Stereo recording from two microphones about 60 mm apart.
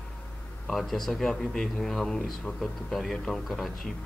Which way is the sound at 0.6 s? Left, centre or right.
Centre.